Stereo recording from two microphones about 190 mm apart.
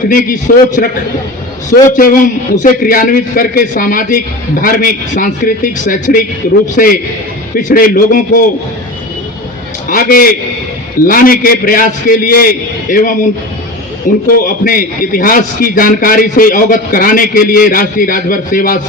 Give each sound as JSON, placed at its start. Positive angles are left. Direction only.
{"t": 0.1, "sound": "a man's voice", "side_deg": 45}
{"t": 9.9, "sound": "a man's voice", "side_deg": 50}
{"t": 14.3, "sound": "a man's voice", "side_deg": 50}